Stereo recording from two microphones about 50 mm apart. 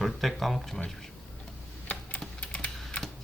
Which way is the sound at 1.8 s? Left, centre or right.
Left.